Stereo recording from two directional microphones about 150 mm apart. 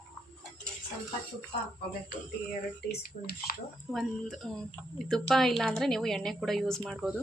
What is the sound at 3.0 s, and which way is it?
Speech, 80° left.